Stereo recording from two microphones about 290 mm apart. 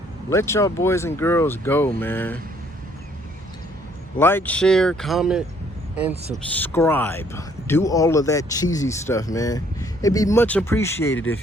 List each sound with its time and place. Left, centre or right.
0.3 s speech: centre
4.2 s speech: centre